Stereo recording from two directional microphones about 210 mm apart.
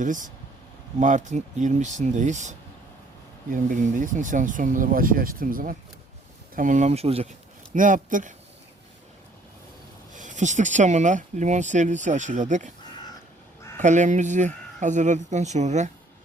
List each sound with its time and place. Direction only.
0.0 s speech: 35° right (ahead or behind)
7.7 s speech: 40° right (ahead or behind)
10.2 s speech: 35° right (ahead or behind)
13.7 s speech: 35° right (ahead or behind)